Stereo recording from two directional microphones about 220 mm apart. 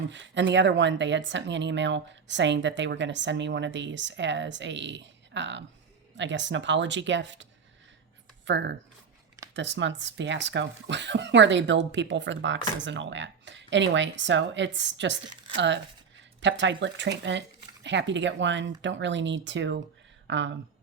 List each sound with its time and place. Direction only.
0.1 s speech: 55° right (ahead or behind)
8.4 s speech: 55° right (ahead or behind)